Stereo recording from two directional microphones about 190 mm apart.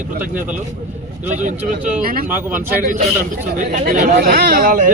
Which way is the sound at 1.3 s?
40° right (ahead or behind).